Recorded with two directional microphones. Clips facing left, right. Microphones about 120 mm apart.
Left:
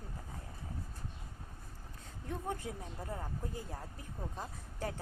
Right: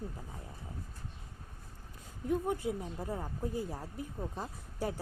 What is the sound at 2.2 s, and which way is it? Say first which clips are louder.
A woman's voice: right 8 dB; 10° right (ahead or behind).